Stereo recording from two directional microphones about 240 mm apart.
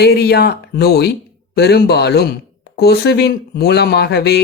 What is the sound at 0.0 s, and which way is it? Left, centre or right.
Speech, left.